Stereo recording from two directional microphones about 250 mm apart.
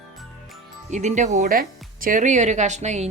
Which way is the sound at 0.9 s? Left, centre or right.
Right.